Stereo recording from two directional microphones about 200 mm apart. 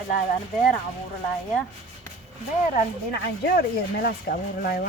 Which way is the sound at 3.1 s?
50° left (ahead or behind).